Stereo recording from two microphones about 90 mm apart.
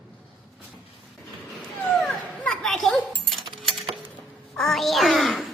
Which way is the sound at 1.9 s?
Centre (ahead or behind).